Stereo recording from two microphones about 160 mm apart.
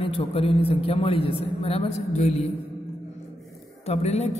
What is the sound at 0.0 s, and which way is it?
A woman's voice, 35° left (ahead or behind).